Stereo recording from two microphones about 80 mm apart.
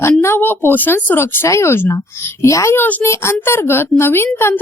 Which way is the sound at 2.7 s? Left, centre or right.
Left.